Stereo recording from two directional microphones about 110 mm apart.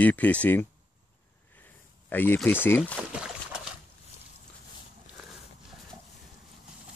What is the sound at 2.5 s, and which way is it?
Speech, 20° left (ahead or behind).